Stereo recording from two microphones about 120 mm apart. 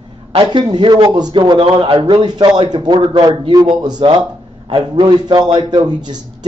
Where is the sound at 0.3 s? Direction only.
45° right (ahead or behind).